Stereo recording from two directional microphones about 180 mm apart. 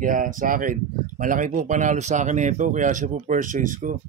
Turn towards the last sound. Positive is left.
turn(degrees=-45)  # may be behind; listen again after turning